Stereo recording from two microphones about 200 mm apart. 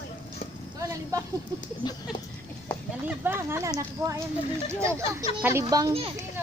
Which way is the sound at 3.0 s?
10° right (ahead or behind).